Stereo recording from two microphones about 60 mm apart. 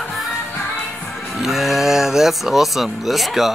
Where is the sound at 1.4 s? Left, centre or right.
Centre.